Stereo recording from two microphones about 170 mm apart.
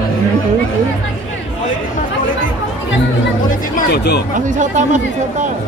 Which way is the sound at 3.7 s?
70° left (ahead or behind).